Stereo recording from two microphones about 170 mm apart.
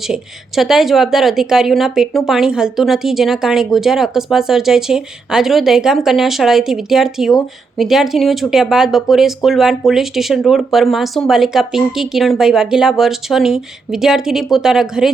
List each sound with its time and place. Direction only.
0.1 s a woman's voice: centre (ahead or behind)